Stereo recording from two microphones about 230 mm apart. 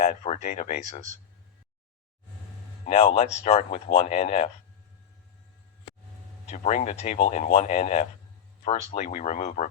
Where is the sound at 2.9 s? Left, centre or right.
Left.